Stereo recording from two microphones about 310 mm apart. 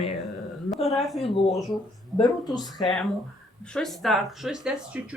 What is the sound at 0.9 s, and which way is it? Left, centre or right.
Speech, centre.